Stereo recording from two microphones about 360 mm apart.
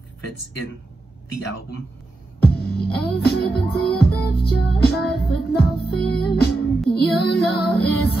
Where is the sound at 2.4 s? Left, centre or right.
Left.